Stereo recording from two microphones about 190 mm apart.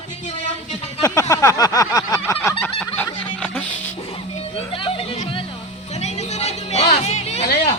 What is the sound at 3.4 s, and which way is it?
Music, 5° left (ahead or behind).